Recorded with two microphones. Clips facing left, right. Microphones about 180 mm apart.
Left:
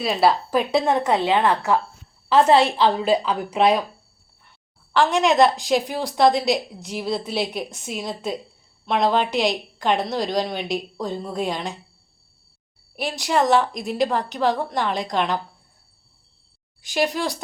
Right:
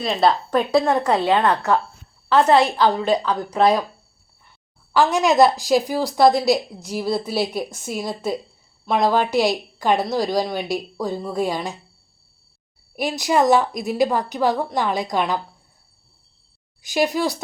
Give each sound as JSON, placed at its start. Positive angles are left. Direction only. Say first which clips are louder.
{"t": 0.0, "sound": "a woman's voice", "louder": "even", "side_deg": 5}
{"t": 0.7, "sound": "a woman's voice", "louder": "right 2 dB", "side_deg": 25}
{"t": 1.4, "sound": "speech", "louder": "right 1 dB", "side_deg": 5}
{"t": 2.5, "sound": "a woman's voice", "louder": "right 2 dB", "side_deg": 30}
{"t": 3.1, "sound": "a woman's voice", "louder": "even", "side_deg": 5}
{"t": 4.9, "sound": "a woman's voice", "louder": "right 1 dB", "side_deg": 0}
{"t": 13.0, "sound": "a woman's voice", "louder": "right 3 dB", "side_deg": -10}
{"t": 16.9, "sound": "a woman's voice", "louder": "right 3 dB", "side_deg": -10}